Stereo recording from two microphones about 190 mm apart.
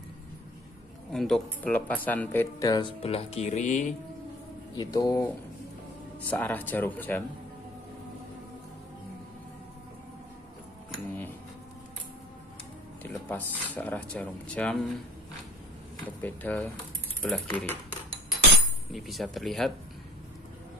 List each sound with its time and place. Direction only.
1.1 s speech: centre (ahead or behind); by 2.9 s 20° left (ahead or behind)
3.0 s speech: 30° left (ahead or behind)
4.7 s speech: 20° left (ahead or behind)
13.0 s speech: 10° left (ahead or behind)
16.2 s speech: 10° left (ahead or behind)
18.9 s speech: centre (ahead or behind)